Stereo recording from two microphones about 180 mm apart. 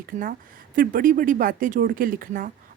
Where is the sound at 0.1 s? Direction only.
45° right (ahead or behind).